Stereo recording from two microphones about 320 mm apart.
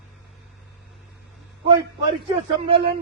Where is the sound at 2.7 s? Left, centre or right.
Centre.